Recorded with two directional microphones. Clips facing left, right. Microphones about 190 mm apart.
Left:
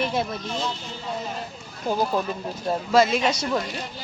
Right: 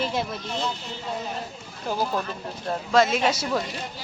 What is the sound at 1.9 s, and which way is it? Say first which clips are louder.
Speech: left 3 dB; 15° left (ahead or behind).